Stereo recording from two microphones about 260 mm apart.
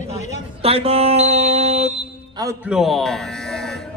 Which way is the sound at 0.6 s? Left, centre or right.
Right.